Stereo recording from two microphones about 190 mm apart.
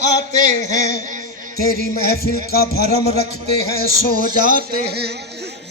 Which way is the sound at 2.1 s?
55° left (ahead or behind).